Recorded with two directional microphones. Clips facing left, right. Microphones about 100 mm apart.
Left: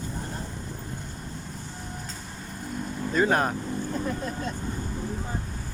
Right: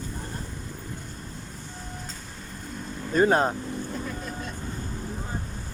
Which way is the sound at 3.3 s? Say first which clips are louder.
Right 2 dB; 25° right (ahead or behind).